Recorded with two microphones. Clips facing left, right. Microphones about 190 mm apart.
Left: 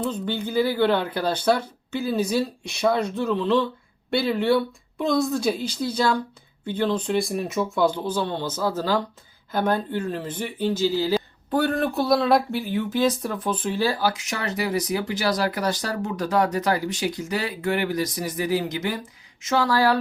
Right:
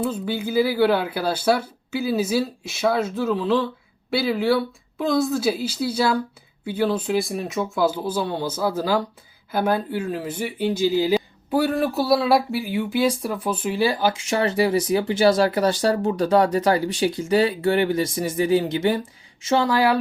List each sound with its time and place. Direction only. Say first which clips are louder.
0.0 s a woman's voice: right 2 dB; 5° right (ahead or behind)
14.1 s speech: right 7 dB; 30° right (ahead or behind)
19.6 s speech: even; 15° right (ahead or behind)